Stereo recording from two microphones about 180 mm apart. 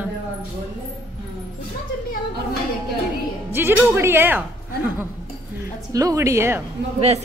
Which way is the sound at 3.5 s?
10° right (ahead or behind).